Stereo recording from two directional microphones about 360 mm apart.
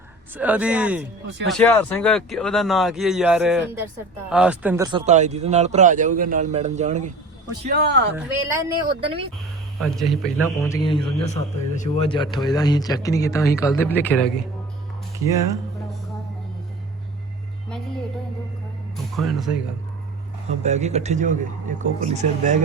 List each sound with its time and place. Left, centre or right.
0.3 s speech: centre; by 8.1 s right
8.1 s speech: centre
9.7 s speech: centre
19.1 s speech: centre
20.6 s speech: centre